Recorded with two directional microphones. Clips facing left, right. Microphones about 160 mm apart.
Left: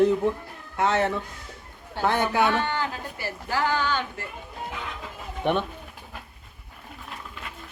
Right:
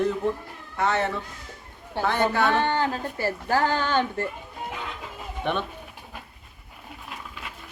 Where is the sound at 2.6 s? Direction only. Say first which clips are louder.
Right 4 dB; 35° right (ahead or behind); by 4.3 s 50° right (ahead or behind).